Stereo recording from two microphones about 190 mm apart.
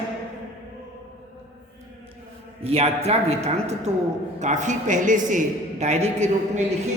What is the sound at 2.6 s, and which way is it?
A man's voice, 30° right (ahead or behind).